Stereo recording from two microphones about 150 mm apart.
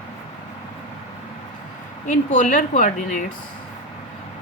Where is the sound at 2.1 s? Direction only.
60° left (ahead or behind).